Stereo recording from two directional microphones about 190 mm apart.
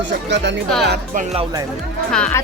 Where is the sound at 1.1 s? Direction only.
35° right (ahead or behind).